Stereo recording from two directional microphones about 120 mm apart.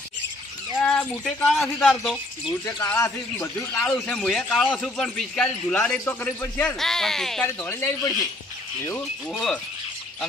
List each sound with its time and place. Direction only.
1.2 s a man's voice: 5° left (ahead or behind)
2.6 s a man's voice: 20° left (ahead or behind)
3.7 s speech: 5° left (ahead or behind)
6.8 s a man's voice: 5° left (ahead or behind)
7.4 s a man's voice: 20° left (ahead or behind)
9.3 s a man's voice: 5° left (ahead or behind)